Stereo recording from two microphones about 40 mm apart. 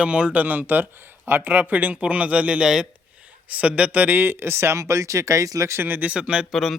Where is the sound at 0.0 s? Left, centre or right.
Right.